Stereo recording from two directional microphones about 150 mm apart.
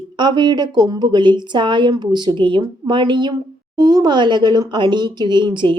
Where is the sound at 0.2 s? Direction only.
30° right (ahead or behind).